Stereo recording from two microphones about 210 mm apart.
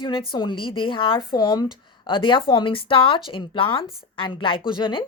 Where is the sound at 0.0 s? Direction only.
25° left (ahead or behind).